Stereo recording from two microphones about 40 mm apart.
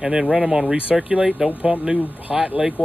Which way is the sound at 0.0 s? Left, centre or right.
Centre.